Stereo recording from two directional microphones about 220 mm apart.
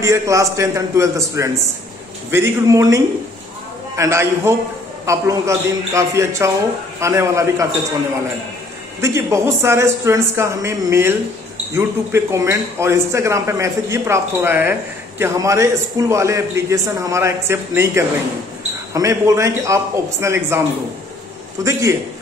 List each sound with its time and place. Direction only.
0.0 s speech: 15° right (ahead or behind)
9.0 s speech: 10° right (ahead or behind)